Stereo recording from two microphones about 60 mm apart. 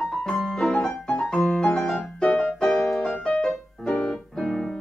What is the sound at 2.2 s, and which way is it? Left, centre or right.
Music, centre.